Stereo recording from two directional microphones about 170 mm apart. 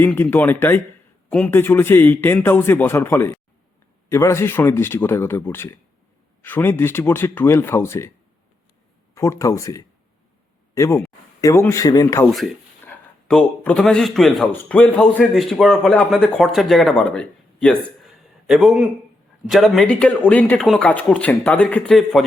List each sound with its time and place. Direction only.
0.0 s a man's voice: 10° left (ahead or behind)
9.1 s a man's voice: 15° left (ahead or behind)
12.2 s a man's voice: centre (ahead or behind)